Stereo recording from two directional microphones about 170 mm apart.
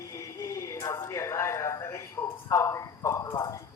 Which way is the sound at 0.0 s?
15° left (ahead or behind).